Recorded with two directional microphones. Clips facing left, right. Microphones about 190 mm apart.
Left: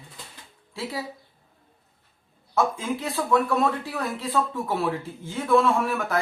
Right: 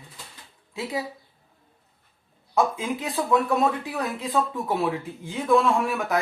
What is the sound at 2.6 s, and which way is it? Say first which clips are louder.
Speech: right 1 dB; 15° right (ahead or behind).